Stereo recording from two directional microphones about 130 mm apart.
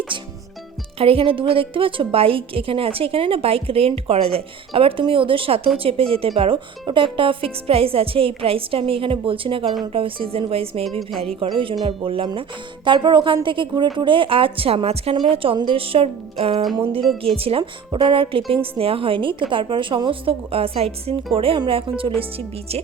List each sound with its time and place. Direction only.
0.9 s a woman's voice: 45° right (ahead or behind)
17.0 s speech: centre (ahead or behind)
17.3 s a woman's voice: 45° right (ahead or behind)